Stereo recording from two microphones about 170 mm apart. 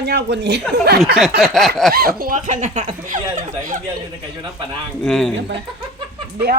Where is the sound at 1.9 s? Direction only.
60° right (ahead or behind).